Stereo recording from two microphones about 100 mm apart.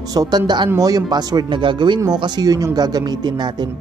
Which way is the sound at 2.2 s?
40° right (ahead or behind).